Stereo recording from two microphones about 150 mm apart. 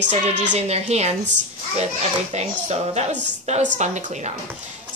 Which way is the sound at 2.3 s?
45° right (ahead or behind).